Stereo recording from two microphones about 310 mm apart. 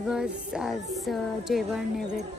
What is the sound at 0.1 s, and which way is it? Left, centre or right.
Music, centre.